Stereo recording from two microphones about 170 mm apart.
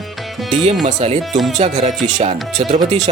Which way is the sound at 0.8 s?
40° right (ahead or behind).